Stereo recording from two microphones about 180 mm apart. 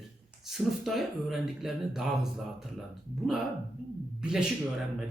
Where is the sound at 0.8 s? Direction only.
Centre (ahead or behind).